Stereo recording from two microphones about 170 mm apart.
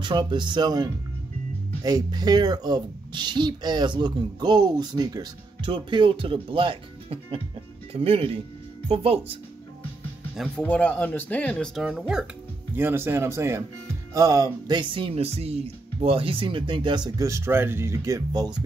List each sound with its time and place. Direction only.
0.0 s speech: 25° right (ahead or behind)
10.3 s speech: centre (ahead or behind); by 18.6 s 25° right (ahead or behind)